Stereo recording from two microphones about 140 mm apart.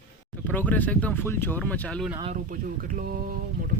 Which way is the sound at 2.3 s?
80° right.